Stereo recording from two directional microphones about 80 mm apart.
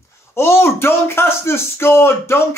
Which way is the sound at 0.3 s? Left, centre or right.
Left.